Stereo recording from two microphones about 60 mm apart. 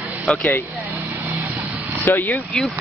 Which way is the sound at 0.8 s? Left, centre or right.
Right.